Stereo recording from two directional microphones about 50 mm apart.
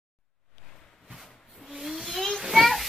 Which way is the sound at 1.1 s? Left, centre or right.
Centre.